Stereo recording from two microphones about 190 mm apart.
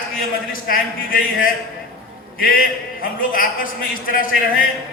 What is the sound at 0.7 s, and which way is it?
A man's voice, 50° left (ahead or behind).